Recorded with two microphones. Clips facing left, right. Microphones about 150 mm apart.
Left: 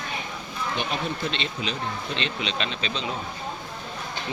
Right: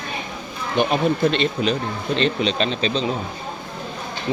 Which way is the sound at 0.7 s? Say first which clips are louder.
Right 12 dB; 50° right (ahead or behind).